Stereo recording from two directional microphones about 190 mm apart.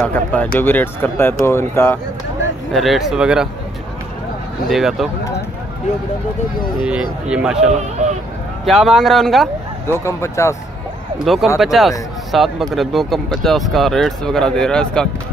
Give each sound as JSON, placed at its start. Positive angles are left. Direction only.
{"t": 0.0, "sound": "speech", "side_deg": 10}
{"t": 2.7, "sound": "speech", "side_deg": 0}
{"t": 4.6, "sound": "speech", "side_deg": 0}
{"t": 6.8, "sound": "speech", "side_deg": -5}
{"t": 8.0, "sound": "a sound", "side_deg": -40}
{"t": 8.6, "sound": "speech", "side_deg": 0}
{"t": 9.8, "sound": "speech", "side_deg": 15}
{"t": 11.5, "sound": "speech", "side_deg": 0}